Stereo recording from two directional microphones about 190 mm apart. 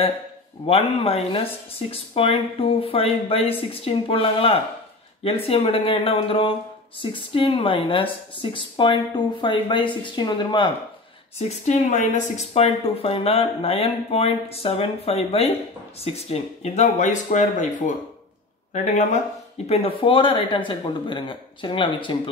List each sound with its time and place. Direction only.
0.7 s speech: 30° left (ahead or behind)
11.3 s speech: 35° left (ahead or behind)
19.6 s speech: 30° left (ahead or behind)